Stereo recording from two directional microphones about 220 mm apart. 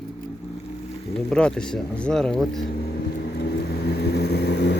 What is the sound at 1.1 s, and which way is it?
Speech, 5° left (ahead or behind).